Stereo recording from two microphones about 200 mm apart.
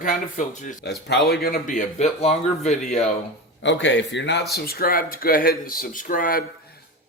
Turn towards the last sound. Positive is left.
turn(degrees=45)  # may be behind; listen again after turning